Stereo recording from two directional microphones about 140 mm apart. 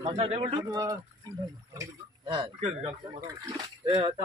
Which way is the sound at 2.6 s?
45° right (ahead or behind).